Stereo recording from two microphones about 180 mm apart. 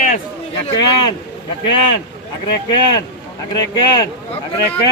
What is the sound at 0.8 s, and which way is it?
Speech, 25° left (ahead or behind).